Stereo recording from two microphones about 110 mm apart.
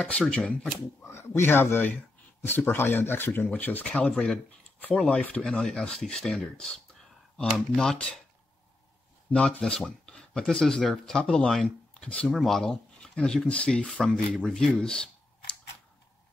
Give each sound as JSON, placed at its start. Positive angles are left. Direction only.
{"t": 0.3, "sound": "speech", "side_deg": 10}
{"t": 1.0, "sound": "a man's voice", "side_deg": 25}
{"t": 9.6, "sound": "speech", "side_deg": 5}